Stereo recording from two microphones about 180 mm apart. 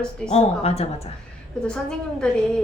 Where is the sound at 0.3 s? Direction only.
35° left (ahead or behind).